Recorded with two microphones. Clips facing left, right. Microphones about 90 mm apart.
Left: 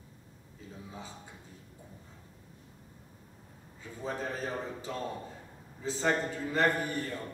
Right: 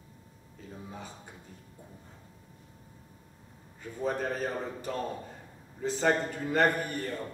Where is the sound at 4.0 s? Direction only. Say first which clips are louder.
Right 5 dB; 60° right (ahead or behind).